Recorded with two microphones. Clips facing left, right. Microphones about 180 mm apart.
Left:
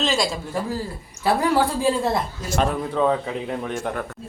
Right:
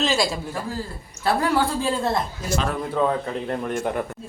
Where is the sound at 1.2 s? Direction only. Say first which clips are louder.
Left 2 dB; 15° left (ahead or behind).